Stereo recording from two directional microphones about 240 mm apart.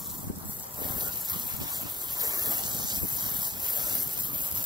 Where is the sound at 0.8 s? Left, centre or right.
Centre.